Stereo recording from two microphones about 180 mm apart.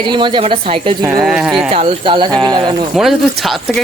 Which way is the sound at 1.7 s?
30° right (ahead or behind).